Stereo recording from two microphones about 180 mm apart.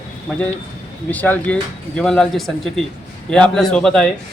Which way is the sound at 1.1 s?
10° left (ahead or behind).